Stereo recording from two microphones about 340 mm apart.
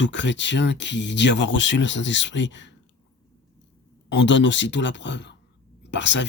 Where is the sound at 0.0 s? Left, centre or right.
Left.